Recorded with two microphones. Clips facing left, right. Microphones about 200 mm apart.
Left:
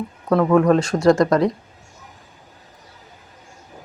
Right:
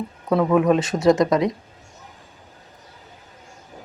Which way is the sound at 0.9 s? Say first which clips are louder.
Left 1 dB; 20° right (ahead or behind).